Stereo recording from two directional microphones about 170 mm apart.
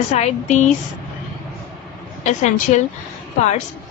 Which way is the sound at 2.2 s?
45° left (ahead or behind).